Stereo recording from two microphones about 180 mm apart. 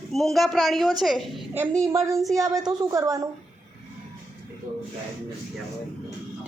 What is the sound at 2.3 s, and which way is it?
Speech, 20° right (ahead or behind).